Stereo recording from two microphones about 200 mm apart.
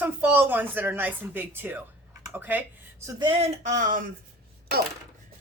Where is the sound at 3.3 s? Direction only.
35° right (ahead or behind).